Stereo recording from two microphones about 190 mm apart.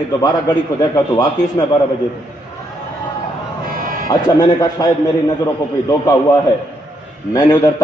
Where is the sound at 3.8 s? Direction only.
50° right (ahead or behind).